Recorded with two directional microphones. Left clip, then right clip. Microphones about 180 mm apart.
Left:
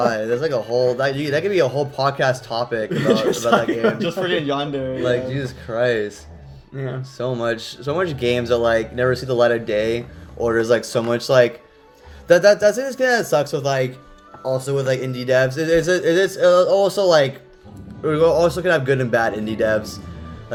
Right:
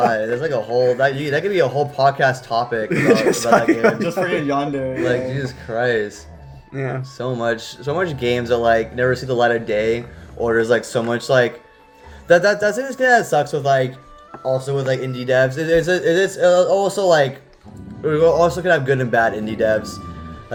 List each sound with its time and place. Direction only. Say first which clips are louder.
0.0 s a man's voice: right 1 dB; 35° left (ahead or behind)
3.5 s speech: right 4 dB; 45° right (ahead or behind)
4.0 s a man's voice: right 1 dB; 25° left (ahead or behind)
6.7 s speech: right 4 dB; 45° right (ahead or behind)
7.2 s a man's voice: even; 25° left (ahead or behind)